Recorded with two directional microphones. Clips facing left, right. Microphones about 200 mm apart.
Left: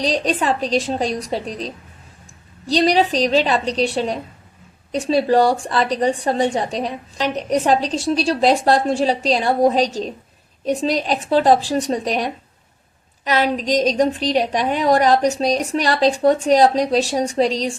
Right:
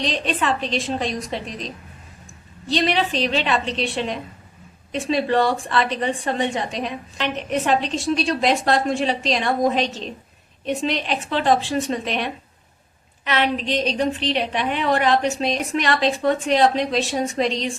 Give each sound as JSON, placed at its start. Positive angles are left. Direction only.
{"t": 0.0, "sound": "a woman's voice", "side_deg": 40}